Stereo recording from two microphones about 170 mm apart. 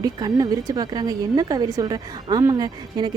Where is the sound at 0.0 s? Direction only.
20° right (ahead or behind).